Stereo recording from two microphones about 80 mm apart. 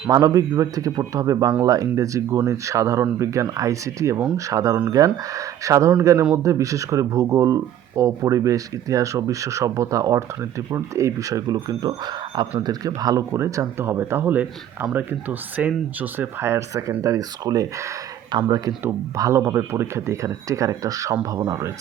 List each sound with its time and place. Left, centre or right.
0.1 s speech: right
17.0 s speech: right
19.1 s speech: right